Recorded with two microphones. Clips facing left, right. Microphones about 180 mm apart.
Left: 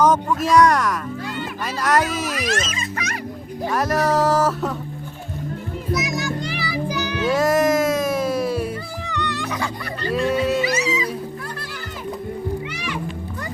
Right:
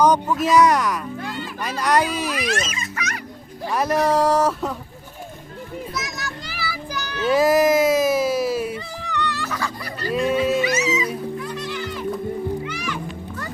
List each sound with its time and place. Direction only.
0.0 s speech: centre (ahead or behind)
2.4 s speech: 35° left (ahead or behind)
3.7 s speech: centre (ahead or behind)
6.8 s child singing: 10° left (ahead or behind)
7.3 s a sound: centre (ahead or behind)
10.0 s music: 5° right (ahead or behind)
10.6 s cat: 35° left (ahead or behind)